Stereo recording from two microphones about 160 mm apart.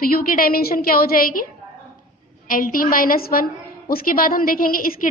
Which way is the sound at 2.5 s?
60° left (ahead or behind).